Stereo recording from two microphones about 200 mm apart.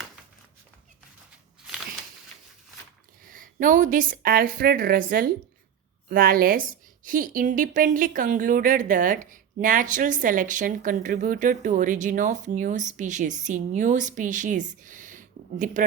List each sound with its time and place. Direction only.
3.2 s a woman's voice: 45° right (ahead or behind)